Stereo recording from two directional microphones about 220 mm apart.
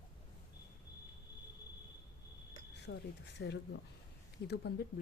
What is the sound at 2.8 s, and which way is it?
Speech, 50° left (ahead or behind).